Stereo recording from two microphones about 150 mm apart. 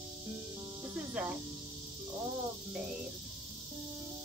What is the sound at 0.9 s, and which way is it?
Music, 10° right (ahead or behind).